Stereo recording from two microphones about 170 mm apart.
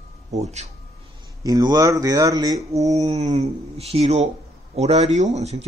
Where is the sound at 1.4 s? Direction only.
25° right (ahead or behind).